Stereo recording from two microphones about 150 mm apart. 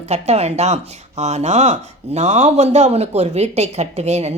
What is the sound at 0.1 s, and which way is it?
Speech, 45° right (ahead or behind).